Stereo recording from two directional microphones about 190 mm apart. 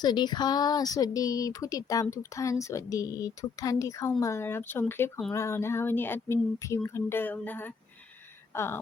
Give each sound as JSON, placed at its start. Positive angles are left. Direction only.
{"t": 0.0, "sound": "speech", "side_deg": 20}